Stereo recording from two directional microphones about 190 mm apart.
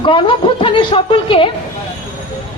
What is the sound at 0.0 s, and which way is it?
A woman's voice, 25° left (ahead or behind).